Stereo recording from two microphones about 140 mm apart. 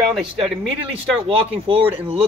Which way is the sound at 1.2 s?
40° right (ahead or behind).